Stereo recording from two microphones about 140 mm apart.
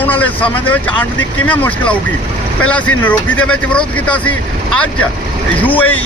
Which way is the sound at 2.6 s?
10° left (ahead or behind).